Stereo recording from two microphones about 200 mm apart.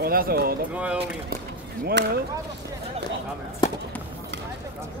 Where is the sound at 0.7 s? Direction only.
5° right (ahead or behind).